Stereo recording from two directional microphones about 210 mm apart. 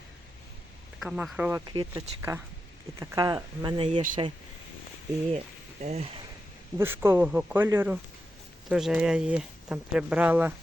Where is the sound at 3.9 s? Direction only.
35° right (ahead or behind).